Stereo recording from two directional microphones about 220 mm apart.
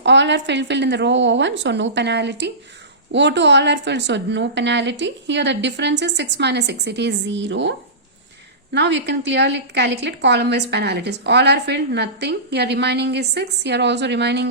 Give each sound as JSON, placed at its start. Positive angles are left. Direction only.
{"t": 0.0, "sound": "a woman's voice", "side_deg": -55}
{"t": 8.7, "sound": "a woman's voice", "side_deg": -50}